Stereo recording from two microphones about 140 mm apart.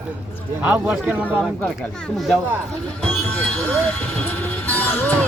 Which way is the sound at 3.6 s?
15° left (ahead or behind).